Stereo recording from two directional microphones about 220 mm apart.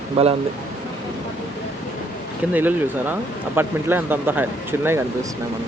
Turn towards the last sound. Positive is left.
turn(degrees=-10)  # may be behind; listen again after turning